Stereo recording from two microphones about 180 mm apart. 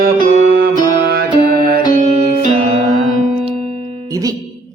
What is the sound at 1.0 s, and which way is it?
Music, 55° right (ahead or behind).